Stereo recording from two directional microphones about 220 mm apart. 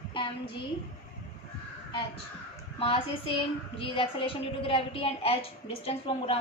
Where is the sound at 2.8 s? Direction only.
25° left (ahead or behind).